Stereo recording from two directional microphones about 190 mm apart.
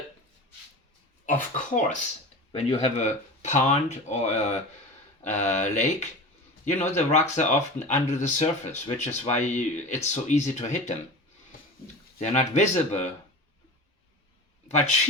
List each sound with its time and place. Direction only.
1.3 s speech: 40° left (ahead or behind)
2.5 s speech: 30° left (ahead or behind)
12.2 s speech: 35° left (ahead or behind)